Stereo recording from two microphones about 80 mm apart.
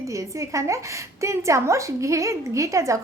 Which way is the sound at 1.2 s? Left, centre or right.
Right.